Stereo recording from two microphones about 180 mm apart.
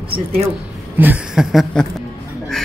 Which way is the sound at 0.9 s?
10° right (ahead or behind).